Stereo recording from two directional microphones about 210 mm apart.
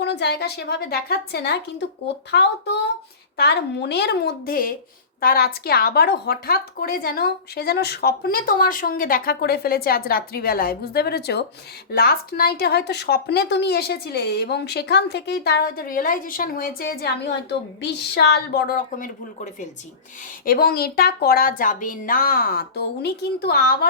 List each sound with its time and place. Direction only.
0.0 s speech: 55° left (ahead or behind)
20.4 s speech: 45° left (ahead or behind)